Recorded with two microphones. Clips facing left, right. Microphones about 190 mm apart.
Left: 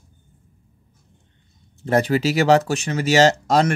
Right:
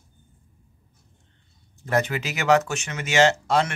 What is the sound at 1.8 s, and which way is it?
Speech, 30° left (ahead or behind).